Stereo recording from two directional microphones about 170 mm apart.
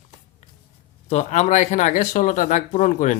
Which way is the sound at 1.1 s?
40° left (ahead or behind).